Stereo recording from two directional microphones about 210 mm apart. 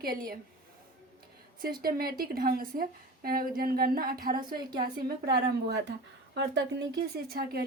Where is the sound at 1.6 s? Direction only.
45° right (ahead or behind).